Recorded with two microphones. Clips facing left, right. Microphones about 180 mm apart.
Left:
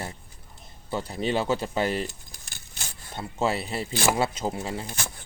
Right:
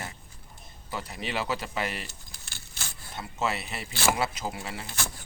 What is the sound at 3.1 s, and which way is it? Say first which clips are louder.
Speech: left 4 dB; 30° left (ahead or behind).